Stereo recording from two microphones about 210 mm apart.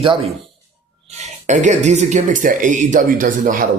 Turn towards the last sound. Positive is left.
turn(degrees=-40)  # may be behind; listen again after turning